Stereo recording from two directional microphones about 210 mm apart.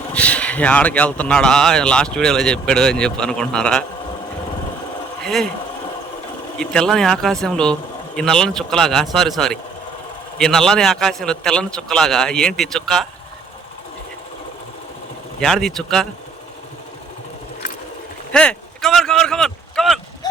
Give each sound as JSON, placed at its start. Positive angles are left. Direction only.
{"t": 0.1, "sound": "speech", "side_deg": 5}
{"t": 5.2, "sound": "speech", "side_deg": 0}
{"t": 6.6, "sound": "speech", "side_deg": 5}
{"t": 15.4, "sound": "speech", "side_deg": 0}
{"t": 18.3, "sound": "speech", "side_deg": 5}